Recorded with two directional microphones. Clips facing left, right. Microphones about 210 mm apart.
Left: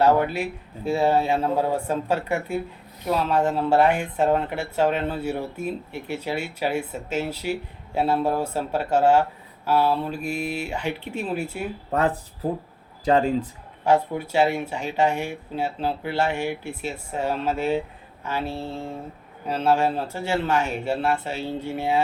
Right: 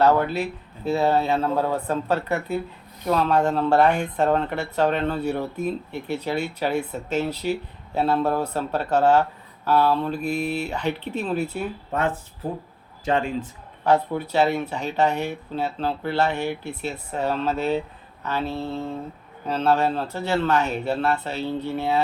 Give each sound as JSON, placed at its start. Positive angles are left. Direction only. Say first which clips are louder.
{"t": 0.0, "sound": "speech", "louder": "even", "side_deg": 10}
{"t": 11.9, "sound": "speech", "louder": "left 4 dB", "side_deg": 35}
{"t": 13.8, "sound": "speech", "louder": "even", "side_deg": 10}